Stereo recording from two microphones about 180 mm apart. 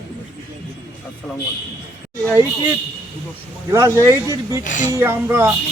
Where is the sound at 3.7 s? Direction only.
15° right (ahead or behind).